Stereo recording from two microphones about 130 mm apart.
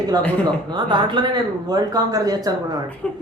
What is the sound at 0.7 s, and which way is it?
Speech, 35° right (ahead or behind).